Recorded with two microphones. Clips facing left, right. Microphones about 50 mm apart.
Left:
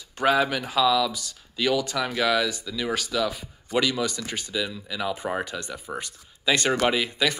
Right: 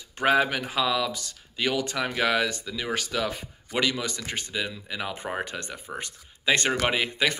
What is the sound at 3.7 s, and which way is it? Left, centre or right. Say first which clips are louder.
Speech: left 3 dB; right.